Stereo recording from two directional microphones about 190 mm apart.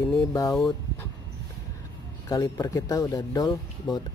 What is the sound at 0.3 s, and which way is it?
Speech, 15° left (ahead or behind).